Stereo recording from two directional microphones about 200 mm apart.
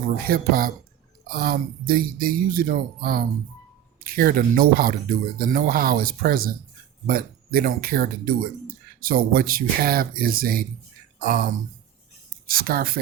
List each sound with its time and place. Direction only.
0.3 s speech: 45° right (ahead or behind)
12.5 s speech: 45° right (ahead or behind)